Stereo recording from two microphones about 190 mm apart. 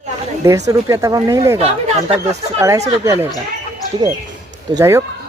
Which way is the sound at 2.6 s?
15° right (ahead or behind).